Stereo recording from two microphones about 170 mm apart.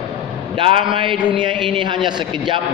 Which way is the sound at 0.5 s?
30° right (ahead or behind).